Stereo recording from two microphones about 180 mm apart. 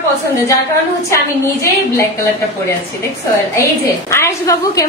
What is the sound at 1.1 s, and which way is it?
Female singing, 15° left (ahead or behind).